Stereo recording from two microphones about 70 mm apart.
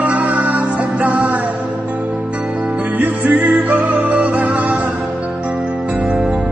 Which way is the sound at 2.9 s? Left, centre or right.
Right.